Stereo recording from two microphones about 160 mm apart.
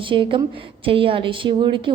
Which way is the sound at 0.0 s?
30° right (ahead or behind).